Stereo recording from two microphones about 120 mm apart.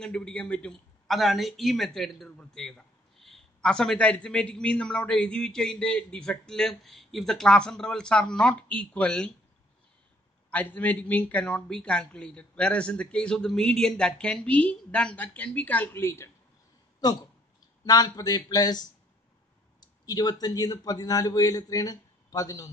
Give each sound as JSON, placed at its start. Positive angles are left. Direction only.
{"t": 0.0, "sound": "a man's voice", "side_deg": 5}
{"t": 10.5, "sound": "a man's voice", "side_deg": 15}
{"t": 17.0, "sound": "a man's voice", "side_deg": 35}